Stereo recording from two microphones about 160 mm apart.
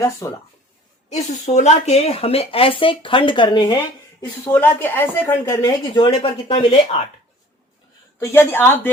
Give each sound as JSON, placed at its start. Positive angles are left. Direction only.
{"t": 0.0, "sound": "speech", "side_deg": 20}
{"t": 1.1, "sound": "speech", "side_deg": 45}
{"t": 3.8, "sound": "speech", "side_deg": 15}
{"t": 5.9, "sound": "speech", "side_deg": 30}
{"t": 8.2, "sound": "speech", "side_deg": 15}